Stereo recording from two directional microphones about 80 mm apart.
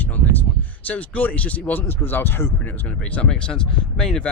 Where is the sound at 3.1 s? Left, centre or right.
Centre.